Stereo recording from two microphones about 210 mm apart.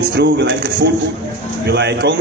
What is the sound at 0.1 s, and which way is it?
A man's voice, 55° right (ahead or behind).